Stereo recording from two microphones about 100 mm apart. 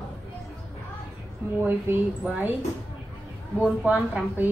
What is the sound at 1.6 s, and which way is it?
Speech, 15° right (ahead or behind).